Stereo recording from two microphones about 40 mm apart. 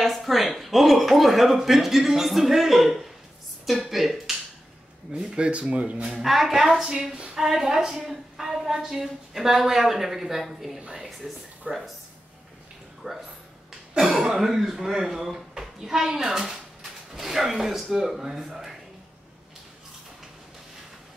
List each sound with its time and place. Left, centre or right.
0.0 s a woman's voice: centre
5.4 s speech: right
6.2 s a woman's voice: centre
11.7 s speech: right
13.0 s a woman's voice: centre